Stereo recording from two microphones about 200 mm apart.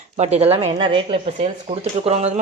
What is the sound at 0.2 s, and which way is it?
Speech, 30° right (ahead or behind).